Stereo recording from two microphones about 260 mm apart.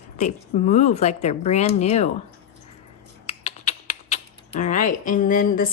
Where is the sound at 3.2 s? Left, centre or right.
Left.